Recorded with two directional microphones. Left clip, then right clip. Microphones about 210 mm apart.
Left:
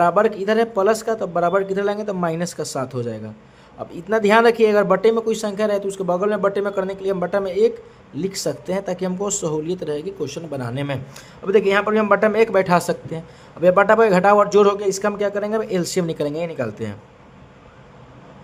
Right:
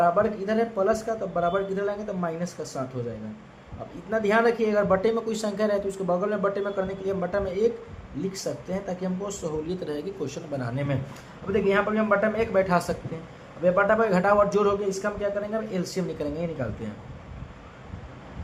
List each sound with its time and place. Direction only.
0.0 s speech: 40° left (ahead or behind)
4.1 s speech: 40° left (ahead or behind)
11.5 s a man's voice: 50° left (ahead or behind)